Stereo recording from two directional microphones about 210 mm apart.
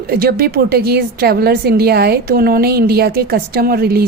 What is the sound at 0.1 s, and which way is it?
A woman's voice, 45° right (ahead or behind).